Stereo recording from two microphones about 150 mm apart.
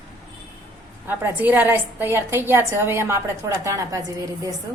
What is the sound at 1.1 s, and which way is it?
A woman's voice, 10° right (ahead or behind).